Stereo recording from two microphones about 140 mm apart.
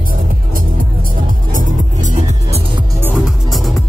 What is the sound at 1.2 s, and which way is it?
Music, 70° right (ahead or behind).